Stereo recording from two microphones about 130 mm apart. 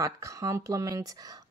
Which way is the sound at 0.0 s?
25° right (ahead or behind).